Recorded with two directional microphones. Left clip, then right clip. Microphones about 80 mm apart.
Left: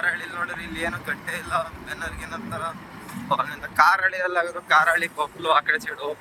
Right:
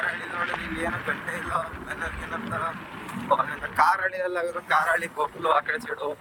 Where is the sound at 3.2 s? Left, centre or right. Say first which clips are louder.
Right 1 dB; right.